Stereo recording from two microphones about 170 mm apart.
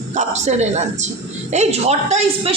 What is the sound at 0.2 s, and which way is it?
A man's voice, 45° right (ahead or behind).